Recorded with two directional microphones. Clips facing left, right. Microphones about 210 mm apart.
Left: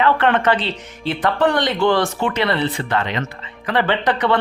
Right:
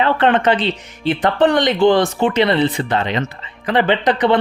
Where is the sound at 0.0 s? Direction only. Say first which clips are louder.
Right 2 dB; 25° right (ahead or behind).